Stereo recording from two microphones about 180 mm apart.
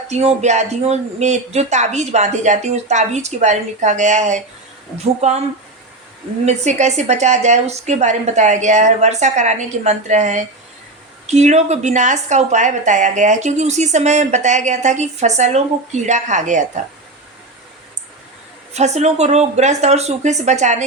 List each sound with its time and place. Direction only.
0.1 s a woman's voice: 35° right (ahead or behind)
6.4 s a woman's voice: 40° right (ahead or behind)
18.7 s a woman's voice: 35° right (ahead or behind)